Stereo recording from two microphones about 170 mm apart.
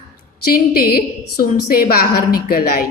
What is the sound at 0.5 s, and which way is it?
A woman's voice, 60° left (ahead or behind).